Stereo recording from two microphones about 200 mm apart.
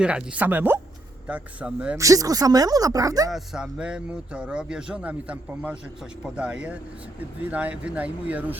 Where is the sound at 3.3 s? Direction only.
5° right (ahead or behind).